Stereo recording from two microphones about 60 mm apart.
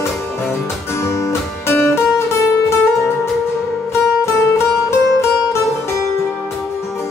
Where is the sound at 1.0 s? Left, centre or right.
Left.